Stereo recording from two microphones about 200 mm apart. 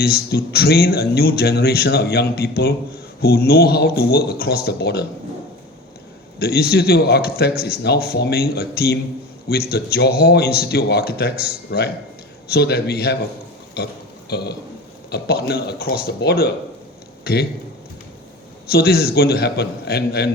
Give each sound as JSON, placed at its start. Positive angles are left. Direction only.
{"t": 0.0, "sound": "speech", "side_deg": 50}
{"t": 6.4, "sound": "speech", "side_deg": 50}
{"t": 14.3, "sound": "speech", "side_deg": 55}
{"t": 18.7, "sound": "speech", "side_deg": 50}